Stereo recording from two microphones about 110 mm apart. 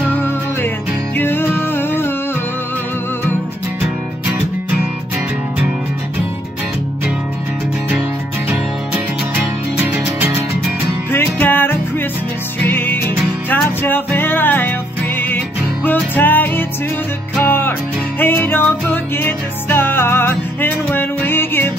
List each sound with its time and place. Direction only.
1.1 s music: 20° left (ahead or behind)
8.5 s music: 15° right (ahead or behind)
11.1 s music: 20° left (ahead or behind)